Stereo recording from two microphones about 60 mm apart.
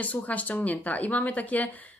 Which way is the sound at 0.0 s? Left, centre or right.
Left.